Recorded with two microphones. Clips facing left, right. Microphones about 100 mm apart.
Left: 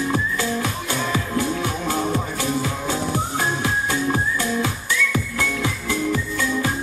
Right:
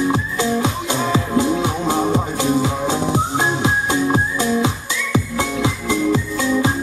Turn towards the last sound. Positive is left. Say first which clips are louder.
# right 5 dB
turn(degrees=-20)  # may be behind; listen again after turning